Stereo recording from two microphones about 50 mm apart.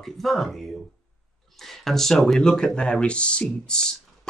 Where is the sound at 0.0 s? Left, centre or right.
Centre.